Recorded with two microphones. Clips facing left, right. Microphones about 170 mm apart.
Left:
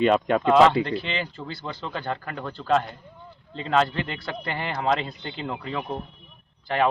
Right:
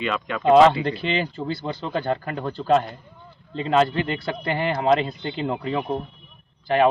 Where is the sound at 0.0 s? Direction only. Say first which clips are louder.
Left 4 dB; 45° left (ahead or behind).